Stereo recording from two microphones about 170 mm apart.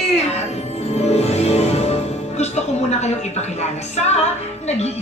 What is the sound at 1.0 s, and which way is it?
Music, 40° left (ahead or behind).